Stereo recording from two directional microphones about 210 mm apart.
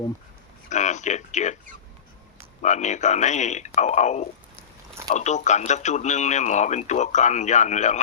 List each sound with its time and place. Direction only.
0.7 s speech: 35° left (ahead or behind)
2.6 s speech: 35° left (ahead or behind)